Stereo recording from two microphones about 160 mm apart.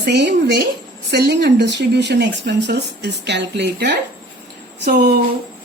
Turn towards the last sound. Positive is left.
turn(degrees=-65)  # may be behind; listen again after turning